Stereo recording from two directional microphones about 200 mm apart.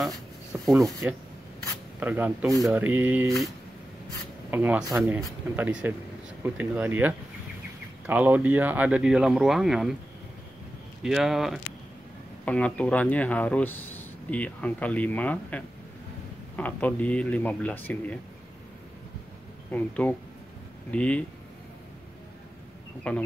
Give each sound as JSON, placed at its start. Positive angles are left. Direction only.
{"t": 0.0, "sound": "rub", "side_deg": 0}
{"t": 0.7, "sound": "speech", "side_deg": -15}
{"t": 11.0, "sound": "speech", "side_deg": 0}
{"t": 19.7, "sound": "speech", "side_deg": 10}
{"t": 23.1, "sound": "speech", "side_deg": 5}